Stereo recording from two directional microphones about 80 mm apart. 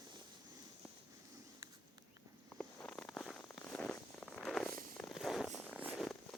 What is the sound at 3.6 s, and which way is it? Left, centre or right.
Zipper, centre.